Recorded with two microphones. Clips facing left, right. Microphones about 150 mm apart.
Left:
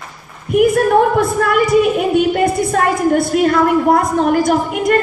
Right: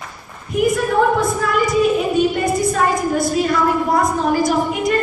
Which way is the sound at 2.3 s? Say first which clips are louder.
Left 3 dB; 60° left (ahead or behind).